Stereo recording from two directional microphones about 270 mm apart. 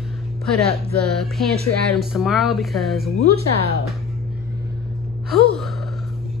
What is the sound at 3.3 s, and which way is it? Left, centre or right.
Speech, right.